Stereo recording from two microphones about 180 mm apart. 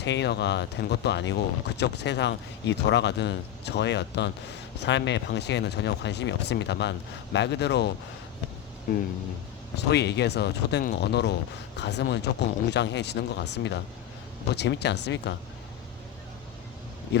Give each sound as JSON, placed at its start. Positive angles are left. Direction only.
{"t": 0.0, "sound": "speech", "side_deg": 75}
{"t": 9.7, "sound": "speech", "side_deg": 70}